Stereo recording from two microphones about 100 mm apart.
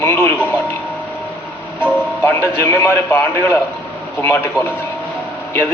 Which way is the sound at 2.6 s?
25° left (ahead or behind).